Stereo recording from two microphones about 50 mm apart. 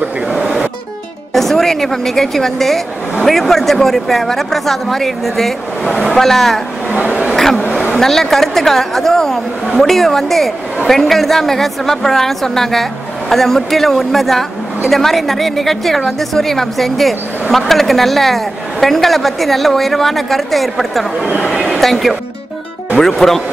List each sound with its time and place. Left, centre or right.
1.3 s a woman's voice: centre
5.9 s speech: centre
6.1 s a woman's voice: centre
6.9 s speech: right
7.3 s vehicle: centre
7.9 s a woman's voice: centre